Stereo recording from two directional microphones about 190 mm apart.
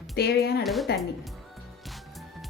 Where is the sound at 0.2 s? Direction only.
60° left (ahead or behind).